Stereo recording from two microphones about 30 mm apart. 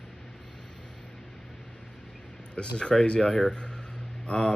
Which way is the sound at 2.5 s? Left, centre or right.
Left.